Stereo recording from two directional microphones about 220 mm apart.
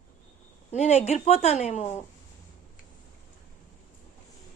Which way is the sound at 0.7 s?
30° left (ahead or behind).